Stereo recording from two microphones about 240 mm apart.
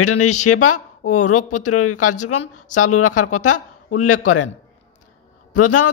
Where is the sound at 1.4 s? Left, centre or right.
Left.